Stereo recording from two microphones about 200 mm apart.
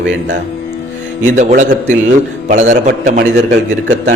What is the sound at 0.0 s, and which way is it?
Speech, 65° right (ahead or behind).